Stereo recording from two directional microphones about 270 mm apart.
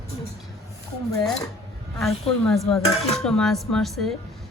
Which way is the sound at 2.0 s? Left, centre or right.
Centre.